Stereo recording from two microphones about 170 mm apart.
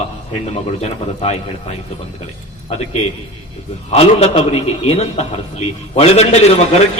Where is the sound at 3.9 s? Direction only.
40° left (ahead or behind).